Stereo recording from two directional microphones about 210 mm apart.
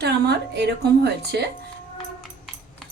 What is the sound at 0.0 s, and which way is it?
A woman's voice, 55° right (ahead or behind).